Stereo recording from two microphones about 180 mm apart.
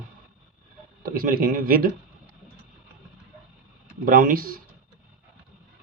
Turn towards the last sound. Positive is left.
turn(degrees=-50)  # may be behind; listen again after turning